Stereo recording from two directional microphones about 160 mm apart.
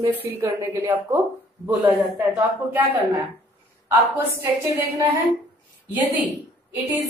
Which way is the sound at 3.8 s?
15° right (ahead or behind).